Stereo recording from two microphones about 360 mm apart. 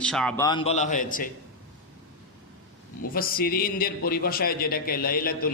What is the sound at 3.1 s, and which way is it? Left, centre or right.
A man's voice, left.